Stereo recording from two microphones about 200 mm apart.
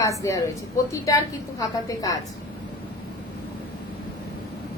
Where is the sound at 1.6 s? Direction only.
20° left (ahead or behind).